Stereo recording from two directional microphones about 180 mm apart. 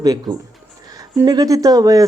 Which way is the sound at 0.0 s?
20° right (ahead or behind).